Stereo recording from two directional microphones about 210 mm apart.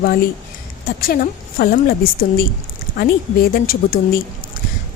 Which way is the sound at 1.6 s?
45° left (ahead or behind).